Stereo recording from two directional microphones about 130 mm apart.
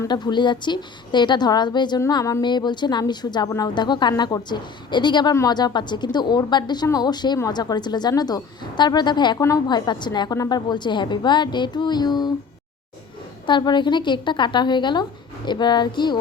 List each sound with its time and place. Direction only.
0.1 s a woman's voice: 35° left (ahead or behind)
13.5 s a woman's voice: 35° left (ahead or behind)